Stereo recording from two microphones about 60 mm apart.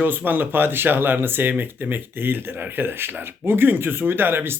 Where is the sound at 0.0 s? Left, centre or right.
Right.